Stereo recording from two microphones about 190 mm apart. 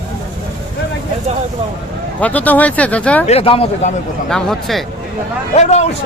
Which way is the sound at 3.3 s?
30° left (ahead or behind).